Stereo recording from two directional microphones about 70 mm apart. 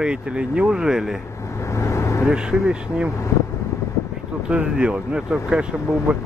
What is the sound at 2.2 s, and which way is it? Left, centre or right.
Speech, centre.